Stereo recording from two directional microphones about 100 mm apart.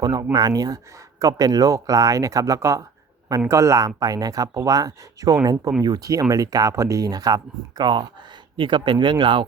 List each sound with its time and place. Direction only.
0.0 s speech: 40° right (ahead or behind)